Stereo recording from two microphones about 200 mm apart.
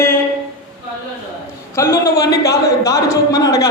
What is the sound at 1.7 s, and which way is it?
Speech, 15° left (ahead or behind).